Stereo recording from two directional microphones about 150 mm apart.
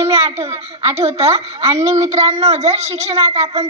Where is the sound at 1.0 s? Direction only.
45° right (ahead or behind).